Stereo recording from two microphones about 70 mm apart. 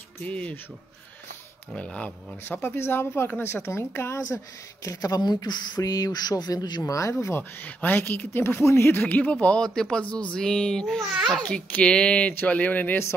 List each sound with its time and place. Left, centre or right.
0.2 s speech: centre
1.8 s speech: centre
2.4 s speech: left
4.8 s speech: left
5.8 s speech: left
6.8 s speech: left
7.6 s speech: left
9.0 s speech: left
11.4 s speech: centre